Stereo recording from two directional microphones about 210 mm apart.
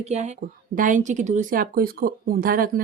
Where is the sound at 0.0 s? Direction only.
35° right (ahead or behind).